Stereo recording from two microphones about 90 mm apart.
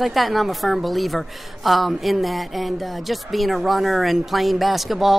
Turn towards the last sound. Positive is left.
turn(degrees=0)  # may be behind; listen again after turning